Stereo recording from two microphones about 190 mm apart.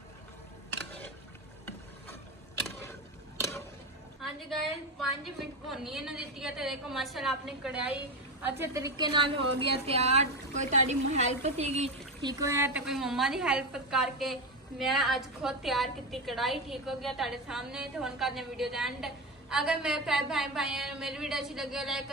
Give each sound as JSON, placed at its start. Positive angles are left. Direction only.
{"t": 2.9, "sound": "a sound", "side_deg": 15}
{"t": 4.2, "sound": "a woman's voice", "side_deg": 0}
{"t": 12.3, "sound": "speech", "side_deg": -15}
{"t": 12.8, "sound": "a woman's voice", "side_deg": 0}